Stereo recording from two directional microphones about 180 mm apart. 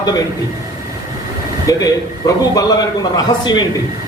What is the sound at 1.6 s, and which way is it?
A man's voice, 20° left (ahead or behind).